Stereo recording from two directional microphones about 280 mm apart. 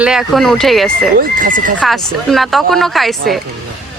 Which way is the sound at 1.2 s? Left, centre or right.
Right.